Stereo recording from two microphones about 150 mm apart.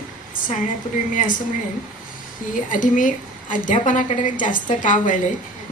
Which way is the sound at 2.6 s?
60° left (ahead or behind).